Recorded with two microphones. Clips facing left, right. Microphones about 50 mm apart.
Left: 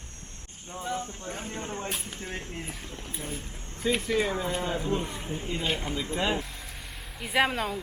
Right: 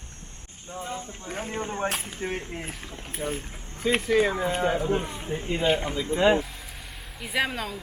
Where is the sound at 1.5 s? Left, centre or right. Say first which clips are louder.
Right 8 dB; right.